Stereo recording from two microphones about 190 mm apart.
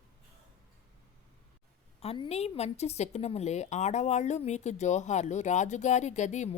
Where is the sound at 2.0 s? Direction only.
30° left (ahead or behind).